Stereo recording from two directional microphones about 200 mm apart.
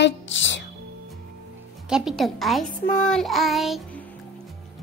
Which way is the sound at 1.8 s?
5° right (ahead or behind).